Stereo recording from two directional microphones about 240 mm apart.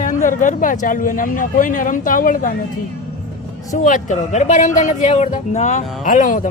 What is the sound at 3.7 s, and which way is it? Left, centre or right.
Speech, left.